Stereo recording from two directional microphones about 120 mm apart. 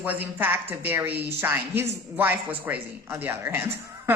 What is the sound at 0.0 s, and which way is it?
Speech, 15° right (ahead or behind).